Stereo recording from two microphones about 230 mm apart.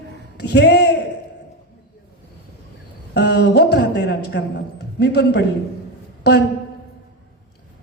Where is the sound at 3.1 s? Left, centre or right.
Left.